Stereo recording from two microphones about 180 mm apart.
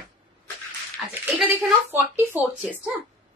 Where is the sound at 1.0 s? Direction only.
10° right (ahead or behind).